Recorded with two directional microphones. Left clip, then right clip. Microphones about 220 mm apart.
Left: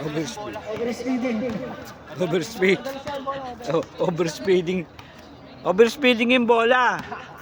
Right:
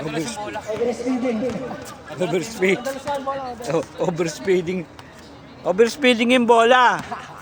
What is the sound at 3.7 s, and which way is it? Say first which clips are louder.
Speech: even; 5° left (ahead or behind).